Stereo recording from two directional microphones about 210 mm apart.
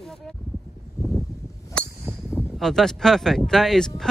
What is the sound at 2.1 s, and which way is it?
Speech, centre (ahead or behind).